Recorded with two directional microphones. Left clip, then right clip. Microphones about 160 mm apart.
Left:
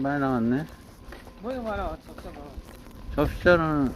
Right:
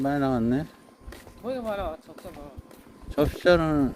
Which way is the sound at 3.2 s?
85° right.